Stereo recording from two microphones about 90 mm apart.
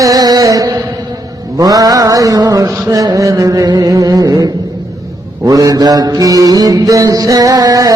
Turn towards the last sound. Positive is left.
turn(degrees=-45)  # may be behind; listen again after turning